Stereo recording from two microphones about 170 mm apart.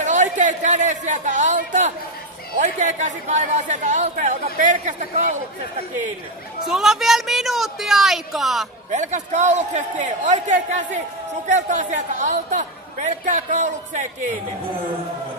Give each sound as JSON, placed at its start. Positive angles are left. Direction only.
{"t": 0.0, "sound": "a man's voice", "side_deg": -45}
{"t": 6.6, "sound": "a woman's voice", "side_deg": 0}
{"t": 8.9, "sound": "speech", "side_deg": -45}